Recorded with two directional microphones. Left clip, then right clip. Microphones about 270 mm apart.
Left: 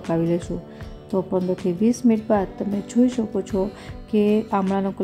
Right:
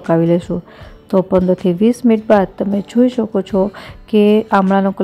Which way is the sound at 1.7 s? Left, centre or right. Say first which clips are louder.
Right 4 dB; centre.